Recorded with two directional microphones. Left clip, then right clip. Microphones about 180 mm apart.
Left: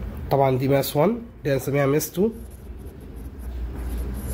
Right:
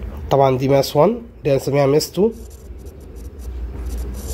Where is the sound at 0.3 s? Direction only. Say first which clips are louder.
Right 5 dB; 30° right (ahead or behind).